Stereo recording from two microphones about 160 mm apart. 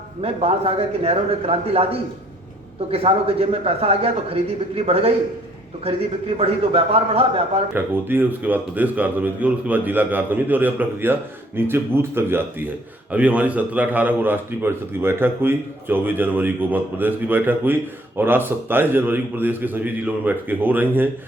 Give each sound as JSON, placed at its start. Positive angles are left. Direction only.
{"t": 0.2, "sound": "a man's voice", "side_deg": -40}
{"t": 6.3, "sound": "a man's voice", "side_deg": -40}
{"t": 7.7, "sound": "a man's voice", "side_deg": -15}